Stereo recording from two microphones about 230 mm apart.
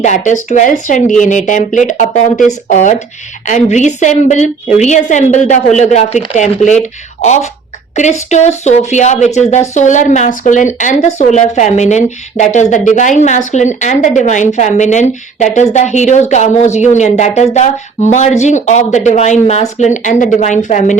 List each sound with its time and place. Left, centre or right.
0.0 s speech: left
7.9 s speech: left